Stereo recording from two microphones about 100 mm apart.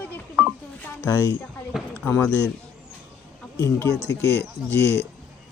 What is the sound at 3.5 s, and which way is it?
Speech, 35° left (ahead or behind).